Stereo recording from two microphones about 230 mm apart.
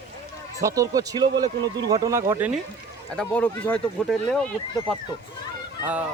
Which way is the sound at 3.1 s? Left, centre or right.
Centre.